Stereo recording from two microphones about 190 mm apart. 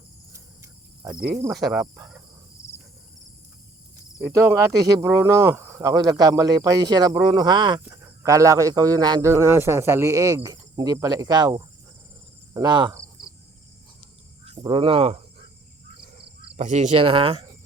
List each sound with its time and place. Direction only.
0.3 s cricket: 15° right (ahead or behind)
1.5 s speech: centre (ahead or behind)
4.2 s speech: 10° right (ahead or behind)
12.5 s cricket: 20° right (ahead or behind)
14.6 s speech: 25° right (ahead or behind)